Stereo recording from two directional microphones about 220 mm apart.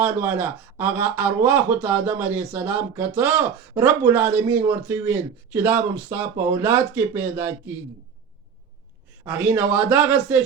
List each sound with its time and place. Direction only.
0.0 s speech: 10° right (ahead or behind)
9.2 s speech: 5° right (ahead or behind)